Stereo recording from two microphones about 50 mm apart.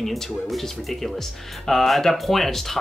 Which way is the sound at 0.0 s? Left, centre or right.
Centre.